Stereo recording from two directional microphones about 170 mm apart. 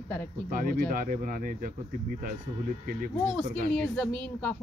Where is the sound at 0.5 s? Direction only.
55° right (ahead or behind).